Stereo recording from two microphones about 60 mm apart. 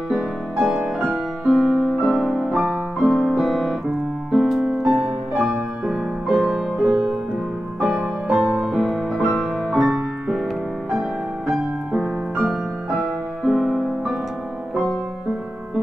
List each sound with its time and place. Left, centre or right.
0.1 s music: centre
2.5 s piano: centre
4.3 s music: centre